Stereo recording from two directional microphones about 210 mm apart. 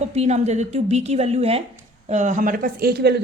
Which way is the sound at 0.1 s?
30° right (ahead or behind).